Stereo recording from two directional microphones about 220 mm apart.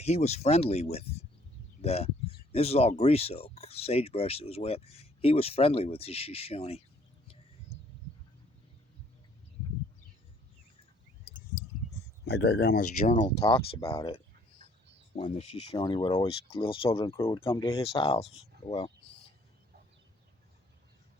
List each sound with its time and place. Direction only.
0.0 s speech: 30° left (ahead or behind)
12.2 s speech: 50° left (ahead or behind)
13.4 s speech: 25° left (ahead or behind)
17.4 s speech: 10° left (ahead or behind)
17.7 s speech: 25° left (ahead or behind)
18.7 s a sound: 20° left (ahead or behind)